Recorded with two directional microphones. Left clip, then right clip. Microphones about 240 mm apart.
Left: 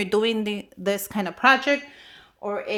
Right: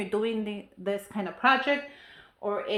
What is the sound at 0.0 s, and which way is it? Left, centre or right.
Speech, left.